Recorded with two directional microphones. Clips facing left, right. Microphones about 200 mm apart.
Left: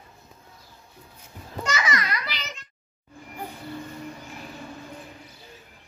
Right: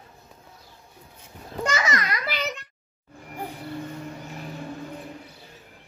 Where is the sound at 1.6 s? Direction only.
50° right (ahead or behind).